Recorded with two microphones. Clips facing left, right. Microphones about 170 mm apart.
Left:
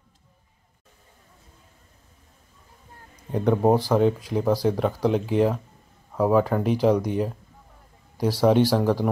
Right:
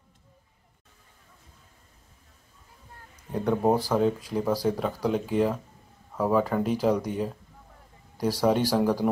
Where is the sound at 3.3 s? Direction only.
10° left (ahead or behind).